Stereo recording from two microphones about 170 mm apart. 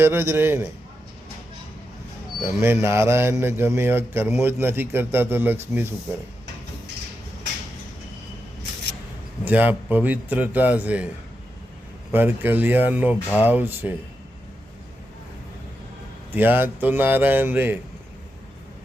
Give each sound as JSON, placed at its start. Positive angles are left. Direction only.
{"t": 0.0, "sound": "a man's voice", "side_deg": -15}
{"t": 2.4, "sound": "a man's voice", "side_deg": -15}
{"t": 9.4, "sound": "a man's voice", "side_deg": -10}
{"t": 12.1, "sound": "a man's voice", "side_deg": -10}
{"t": 16.3, "sound": "a man's voice", "side_deg": -10}